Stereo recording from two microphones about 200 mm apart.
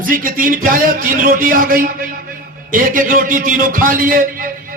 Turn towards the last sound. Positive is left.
turn(degrees=-45)  # may be behind; listen again after turning